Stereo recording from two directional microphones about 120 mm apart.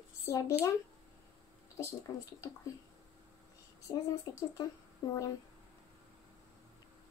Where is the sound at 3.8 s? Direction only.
30° left (ahead or behind).